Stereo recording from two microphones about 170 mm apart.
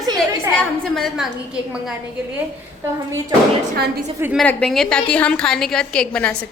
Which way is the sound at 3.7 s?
70° right (ahead or behind).